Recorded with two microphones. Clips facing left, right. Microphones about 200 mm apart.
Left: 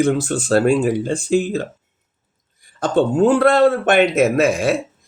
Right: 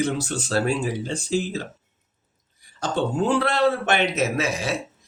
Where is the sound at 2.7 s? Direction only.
55° left (ahead or behind).